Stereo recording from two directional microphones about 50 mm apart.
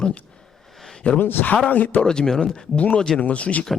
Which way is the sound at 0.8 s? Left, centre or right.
Centre.